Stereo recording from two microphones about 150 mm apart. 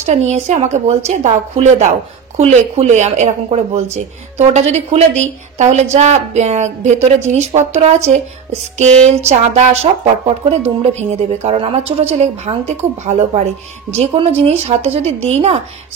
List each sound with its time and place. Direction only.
0.0 s a woman's voice: 50° right (ahead or behind)